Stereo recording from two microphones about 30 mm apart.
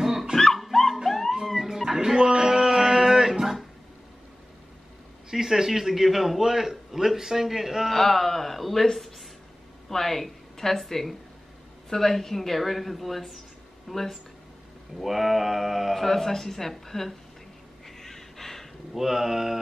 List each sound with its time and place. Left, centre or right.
0.0 s music: centre
0.6 s a sound: centre
1.0 s music: centre
1.5 s music: centre
2.0 s a sound: right
5.3 s a man's voice: centre
7.9 s speech: centre
9.8 s a woman's voice: centre
15.0 s a woman's voice: centre
15.9 s speech: centre
17.8 s a sound: centre
18.9 s a man's voice: centre